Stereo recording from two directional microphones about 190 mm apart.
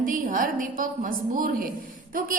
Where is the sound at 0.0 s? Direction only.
45° right (ahead or behind).